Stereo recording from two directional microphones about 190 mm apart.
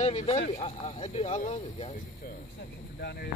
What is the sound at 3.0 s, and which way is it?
Speech, 55° left (ahead or behind).